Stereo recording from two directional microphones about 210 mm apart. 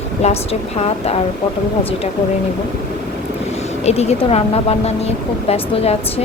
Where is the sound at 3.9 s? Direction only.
30° left (ahead or behind).